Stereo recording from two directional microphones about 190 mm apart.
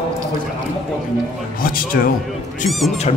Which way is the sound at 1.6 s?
50° left (ahead or behind).